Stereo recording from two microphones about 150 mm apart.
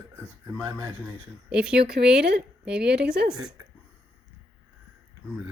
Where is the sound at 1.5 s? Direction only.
5° right (ahead or behind).